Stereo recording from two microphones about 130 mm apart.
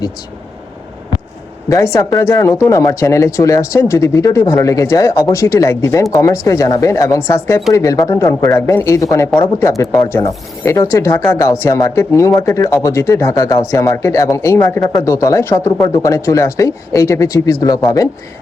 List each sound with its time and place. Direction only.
1.7 s speech: 25° left (ahead or behind)